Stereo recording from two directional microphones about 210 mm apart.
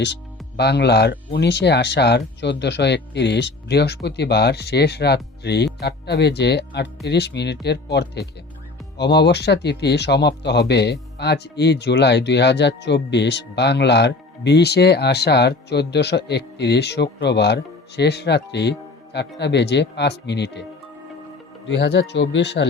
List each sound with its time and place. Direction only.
0.0 s speech: 55° left (ahead or behind)
21.7 s speech: 55° left (ahead or behind)